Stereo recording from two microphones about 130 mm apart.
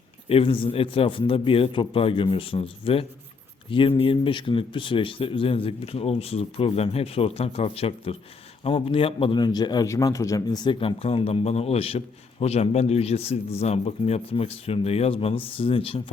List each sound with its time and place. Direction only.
0.3 s a man's voice: 45° left (ahead or behind)